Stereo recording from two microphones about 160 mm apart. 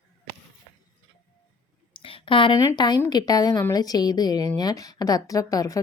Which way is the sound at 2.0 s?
30° left (ahead or behind).